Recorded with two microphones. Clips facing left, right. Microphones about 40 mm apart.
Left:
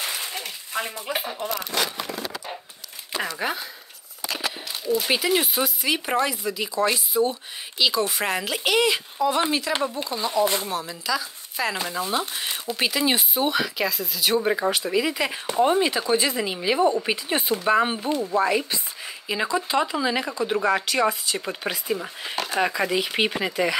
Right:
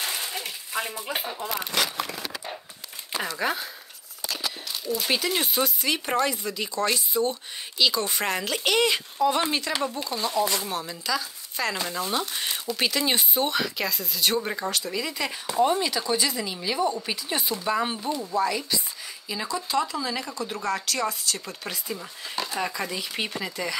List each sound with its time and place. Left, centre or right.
0.0 s a sound: centre
1.0 s speech: centre
3.3 s speech: centre
4.8 s speech: centre
10.0 s speech: centre
10.3 s speech: left
10.7 s speech: centre
14.4 s speech: centre; by 20.3 s left
20.5 s speech: left
22.3 s speech: left
22.8 s speech: left